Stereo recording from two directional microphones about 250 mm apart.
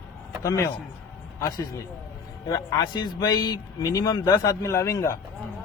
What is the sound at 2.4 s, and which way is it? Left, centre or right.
A man's voice, centre.